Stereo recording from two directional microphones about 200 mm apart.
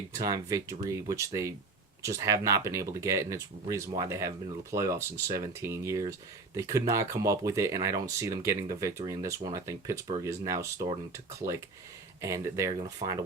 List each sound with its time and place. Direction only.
0.2 s speech: 15° right (ahead or behind)